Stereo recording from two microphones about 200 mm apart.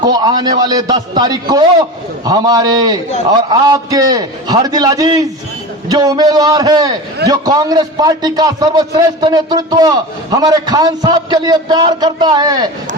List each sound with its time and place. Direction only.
0.0 s a man's voice: 20° right (ahead or behind)